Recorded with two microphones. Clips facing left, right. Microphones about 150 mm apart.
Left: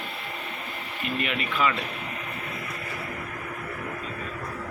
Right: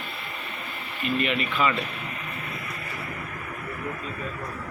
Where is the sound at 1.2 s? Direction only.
5° left (ahead or behind).